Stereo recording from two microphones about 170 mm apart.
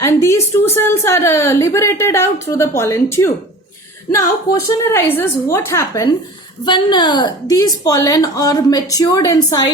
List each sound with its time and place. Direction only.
0.0 s a woman's voice: 15° left (ahead or behind)
4.6 s a woman's voice: 15° left (ahead or behind)